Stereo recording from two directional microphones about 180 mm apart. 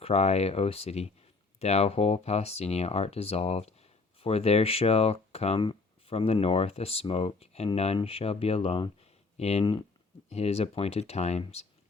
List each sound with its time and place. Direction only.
0.0 s speech: 35° left (ahead or behind)